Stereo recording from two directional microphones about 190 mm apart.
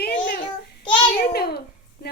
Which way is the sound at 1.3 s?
55° left (ahead or behind).